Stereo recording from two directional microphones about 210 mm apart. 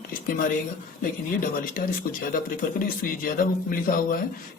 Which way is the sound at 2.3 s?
40° left (ahead or behind).